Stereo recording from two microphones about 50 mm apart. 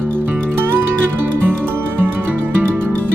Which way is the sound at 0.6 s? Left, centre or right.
Right.